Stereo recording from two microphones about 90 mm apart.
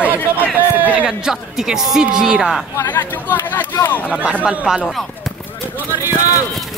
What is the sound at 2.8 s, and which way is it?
Speech, 25° left (ahead or behind).